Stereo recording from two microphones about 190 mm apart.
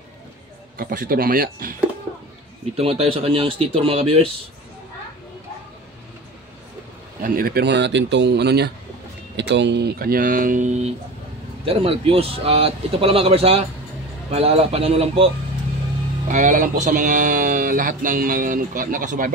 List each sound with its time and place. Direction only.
0.7 s speech: 50° right (ahead or behind)
2.8 s a man's voice: 30° right (ahead or behind)
7.2 s a man's voice: 50° right (ahead or behind); by 15.3 s 30° right (ahead or behind)
16.3 s speech: 45° right (ahead or behind)